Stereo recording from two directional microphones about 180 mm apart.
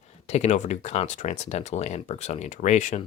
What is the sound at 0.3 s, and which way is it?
Speech, 40° left (ahead or behind).